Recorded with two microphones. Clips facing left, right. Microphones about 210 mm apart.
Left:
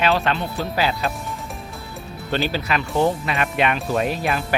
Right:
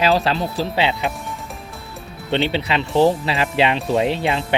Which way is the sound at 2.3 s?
25° right (ahead or behind).